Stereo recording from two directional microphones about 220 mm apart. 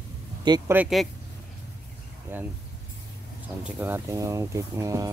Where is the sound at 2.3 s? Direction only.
10° right (ahead or behind).